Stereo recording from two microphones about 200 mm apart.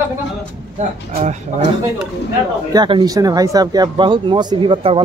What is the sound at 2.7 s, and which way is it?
Speech, 20° right (ahead or behind).